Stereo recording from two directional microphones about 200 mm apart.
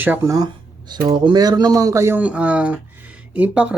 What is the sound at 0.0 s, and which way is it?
Speech, 10° right (ahead or behind).